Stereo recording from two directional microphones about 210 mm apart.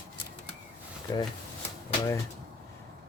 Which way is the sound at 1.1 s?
20° left (ahead or behind).